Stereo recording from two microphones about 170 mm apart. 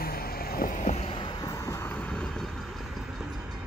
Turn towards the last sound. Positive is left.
turn(degrees=0)  # may be behind; listen again after turning